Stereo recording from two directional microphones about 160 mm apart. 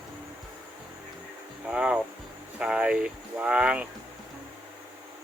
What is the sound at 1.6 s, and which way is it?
Speech, 5° right (ahead or behind).